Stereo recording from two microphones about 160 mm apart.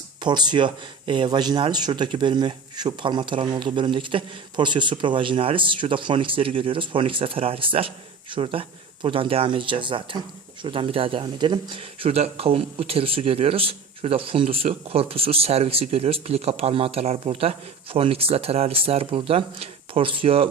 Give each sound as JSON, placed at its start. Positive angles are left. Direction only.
{"t": 0.2, "sound": "a man's voice", "side_deg": -25}